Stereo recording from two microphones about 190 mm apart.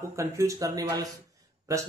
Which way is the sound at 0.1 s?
15° right (ahead or behind).